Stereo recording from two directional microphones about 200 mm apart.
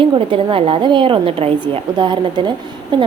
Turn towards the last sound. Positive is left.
turn(degrees=-25)  # may be behind; listen again after turning